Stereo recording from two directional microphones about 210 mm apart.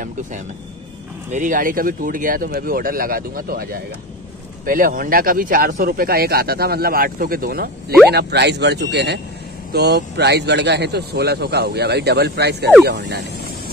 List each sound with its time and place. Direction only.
1.3 s speech: 40° right (ahead or behind)